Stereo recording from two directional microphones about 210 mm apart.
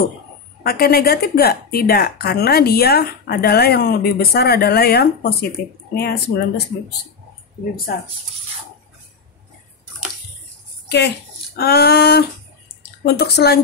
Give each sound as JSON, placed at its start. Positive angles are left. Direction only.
{"t": 0.7, "sound": "speech", "side_deg": 45}
{"t": 10.9, "sound": "speech", "side_deg": 50}